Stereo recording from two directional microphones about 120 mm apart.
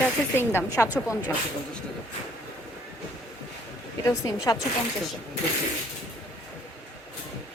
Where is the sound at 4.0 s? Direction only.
30° left (ahead or behind).